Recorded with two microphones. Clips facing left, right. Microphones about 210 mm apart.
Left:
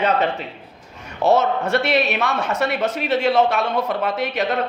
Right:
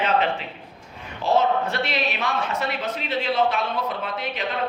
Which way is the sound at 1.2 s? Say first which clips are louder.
Left 3 dB; 75° left (ahead or behind).